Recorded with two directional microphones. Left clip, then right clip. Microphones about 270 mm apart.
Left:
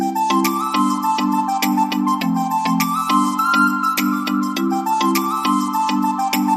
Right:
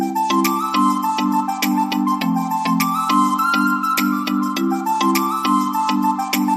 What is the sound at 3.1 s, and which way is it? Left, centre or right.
Music, centre.